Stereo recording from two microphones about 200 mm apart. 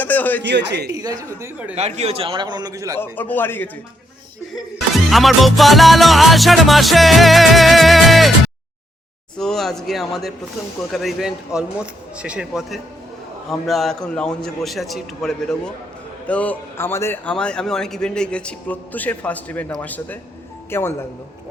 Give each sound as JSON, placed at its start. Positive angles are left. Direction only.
{"t": 0.0, "sound": "a sound", "side_deg": 10}
{"t": 0.4, "sound": "a man's voice", "side_deg": -60}
{"t": 0.9, "sound": "a man's voice", "side_deg": -20}
{"t": 1.4, "sound": "speech", "side_deg": -10}
{"t": 2.0, "sound": "a man's voice", "side_deg": -30}
{"t": 3.0, "sound": "a man's voice", "side_deg": 10}
{"t": 4.9, "sound": "music", "side_deg": 0}
{"t": 9.4, "sound": "music", "side_deg": 0}
{"t": 16.2, "sound": "a man's voice", "side_deg": 5}